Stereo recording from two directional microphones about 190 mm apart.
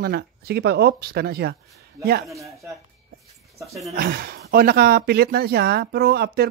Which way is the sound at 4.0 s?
55° right (ahead or behind).